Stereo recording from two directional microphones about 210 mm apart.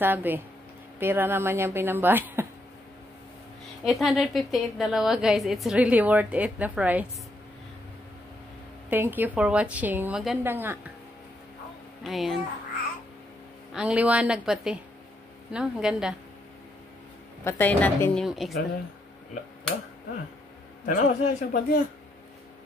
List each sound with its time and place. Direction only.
0.0 s a woman's voice: 10° right (ahead or behind)
3.8 s a woman's voice: centre (ahead or behind)
8.9 s a woman's voice: 10° right (ahead or behind)
12.0 s a woman's voice: centre (ahead or behind)
13.7 s a woman's voice: 5° right (ahead or behind)
17.5 s a woman's voice: 10° left (ahead or behind)
20.8 s speech: 35° left (ahead or behind)